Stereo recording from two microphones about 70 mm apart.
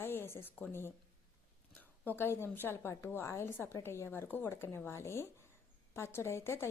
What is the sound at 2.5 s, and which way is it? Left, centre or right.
A woman's voice, left.